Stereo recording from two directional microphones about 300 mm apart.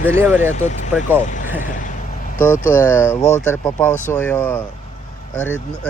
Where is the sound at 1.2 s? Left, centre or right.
Left.